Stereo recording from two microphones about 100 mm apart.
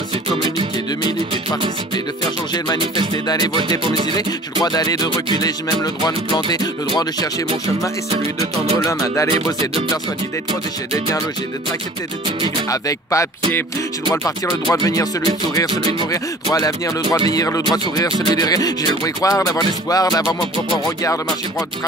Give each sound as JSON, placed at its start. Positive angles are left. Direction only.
{"t": 3.8, "sound": "music", "side_deg": -60}
{"t": 4.6, "sound": "music", "side_deg": 40}
{"t": 6.5, "sound": "music", "side_deg": 40}
{"t": 8.1, "sound": "music", "side_deg": -90}
{"t": 8.7, "sound": "music", "side_deg": 30}
{"t": 12.6, "sound": "music", "side_deg": 35}
{"t": 14.4, "sound": "music", "side_deg": 35}
{"t": 15.7, "sound": "music", "side_deg": -60}
{"t": 16.1, "sound": "music", "side_deg": 35}